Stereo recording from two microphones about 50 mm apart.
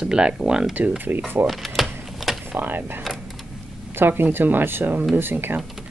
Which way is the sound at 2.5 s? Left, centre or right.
Right.